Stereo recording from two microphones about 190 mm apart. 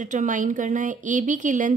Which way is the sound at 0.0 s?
40° right (ahead or behind).